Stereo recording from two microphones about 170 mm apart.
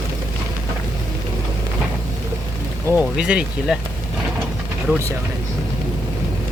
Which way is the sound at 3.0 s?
5° right (ahead or behind).